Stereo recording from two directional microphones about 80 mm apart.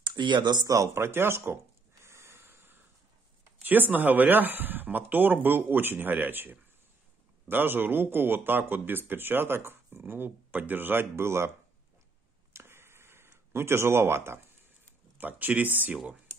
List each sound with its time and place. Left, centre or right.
0.0 s speech: right
0.7 s speech: right
2.0 s a sound: right
3.6 s a man's voice: right
12.5 s a sound: right
15.1 s a man's voice: right